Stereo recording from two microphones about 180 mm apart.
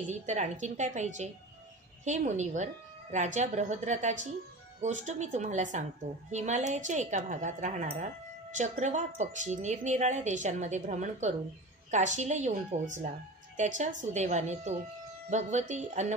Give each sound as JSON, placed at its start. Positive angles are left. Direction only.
{"t": 0.1, "sound": "a woman's voice", "side_deg": -40}